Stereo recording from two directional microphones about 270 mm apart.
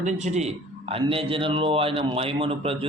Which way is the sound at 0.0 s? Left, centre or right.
Right.